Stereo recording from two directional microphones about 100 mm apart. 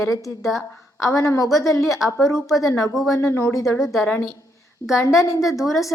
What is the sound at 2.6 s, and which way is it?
Speech, 35° left (ahead or behind).